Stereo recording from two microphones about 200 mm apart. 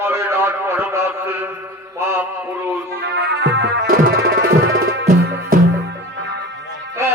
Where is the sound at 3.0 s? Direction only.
55° right (ahead or behind).